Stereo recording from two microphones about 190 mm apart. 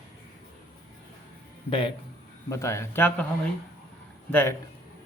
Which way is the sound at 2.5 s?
15° left (ahead or behind).